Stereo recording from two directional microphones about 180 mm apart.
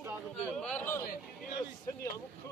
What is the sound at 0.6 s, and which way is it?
Speech, 5° left (ahead or behind).